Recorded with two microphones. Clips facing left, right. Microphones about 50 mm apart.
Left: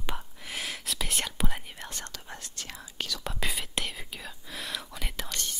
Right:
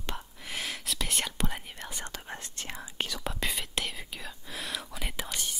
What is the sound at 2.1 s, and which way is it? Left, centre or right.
Whispering, right.